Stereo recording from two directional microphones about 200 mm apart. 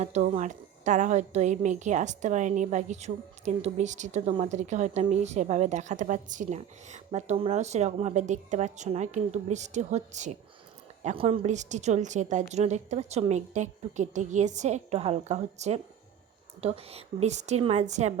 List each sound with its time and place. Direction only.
0.0 s a woman's voice: 35° right (ahead or behind)